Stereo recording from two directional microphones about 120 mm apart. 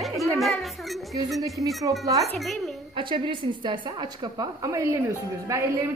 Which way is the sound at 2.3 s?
Centre (ahead or behind).